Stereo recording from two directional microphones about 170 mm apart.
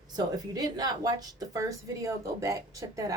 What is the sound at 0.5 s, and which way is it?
A woman's voice, 20° right (ahead or behind).